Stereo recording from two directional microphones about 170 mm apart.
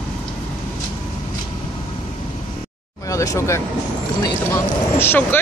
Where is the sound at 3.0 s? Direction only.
20° left (ahead or behind).